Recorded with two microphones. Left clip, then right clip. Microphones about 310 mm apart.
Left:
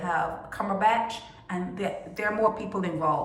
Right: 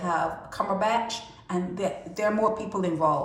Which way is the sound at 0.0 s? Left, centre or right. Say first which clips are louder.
Right 1 dB; centre.